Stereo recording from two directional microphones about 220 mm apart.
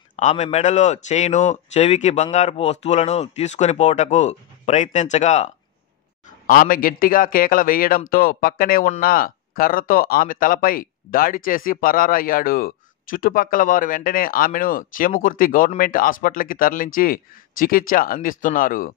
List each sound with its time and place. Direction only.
0.1 s a man's voice: 30° left (ahead or behind)